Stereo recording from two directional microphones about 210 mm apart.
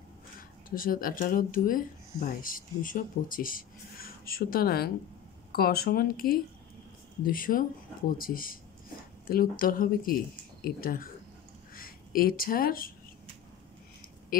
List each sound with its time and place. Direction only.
0.7 s speech: 45° left (ahead or behind)